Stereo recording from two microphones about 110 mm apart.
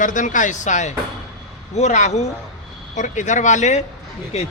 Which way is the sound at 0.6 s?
90° left.